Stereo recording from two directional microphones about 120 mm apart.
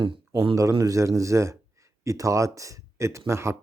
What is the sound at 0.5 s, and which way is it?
A man's voice, 25° right (ahead or behind).